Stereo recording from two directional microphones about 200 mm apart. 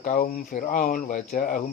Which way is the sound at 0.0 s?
40° left (ahead or behind).